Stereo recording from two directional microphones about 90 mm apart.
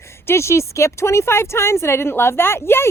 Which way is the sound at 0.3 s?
30° left (ahead or behind).